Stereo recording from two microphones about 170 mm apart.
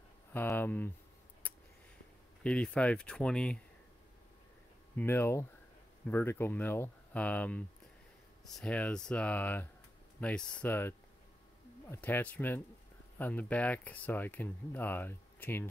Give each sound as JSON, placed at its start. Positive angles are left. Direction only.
{"t": 0.3, "sound": "speech", "side_deg": 10}
{"t": 1.4, "sound": "a sound", "side_deg": 10}
{"t": 2.4, "sound": "speech", "side_deg": 5}
{"t": 4.9, "sound": "speech", "side_deg": 15}